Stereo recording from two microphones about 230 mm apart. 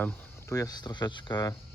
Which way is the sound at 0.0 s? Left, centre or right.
Centre.